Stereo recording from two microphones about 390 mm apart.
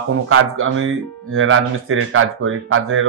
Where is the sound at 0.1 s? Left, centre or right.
Right.